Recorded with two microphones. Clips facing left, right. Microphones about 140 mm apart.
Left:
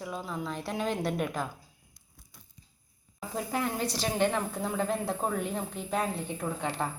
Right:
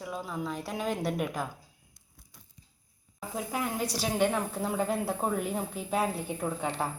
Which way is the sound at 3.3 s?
10° right (ahead or behind).